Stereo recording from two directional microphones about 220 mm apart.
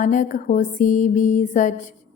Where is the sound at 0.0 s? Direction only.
35° left (ahead or behind).